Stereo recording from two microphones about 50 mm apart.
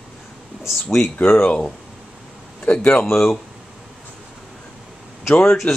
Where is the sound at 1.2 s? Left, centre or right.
Left.